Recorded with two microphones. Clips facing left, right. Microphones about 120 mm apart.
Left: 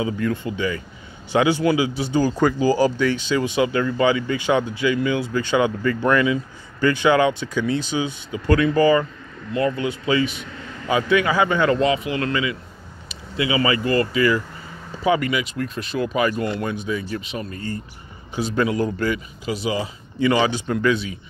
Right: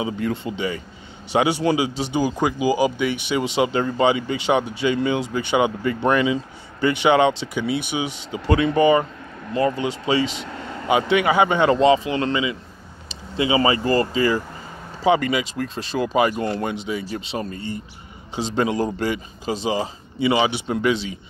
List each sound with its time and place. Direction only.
0.0 s speech: 25° right (ahead or behind)
2.1 s speech: 15° right (ahead or behind)
8.5 s speech: 25° right (ahead or behind)
20.2 s speech: 15° right (ahead or behind)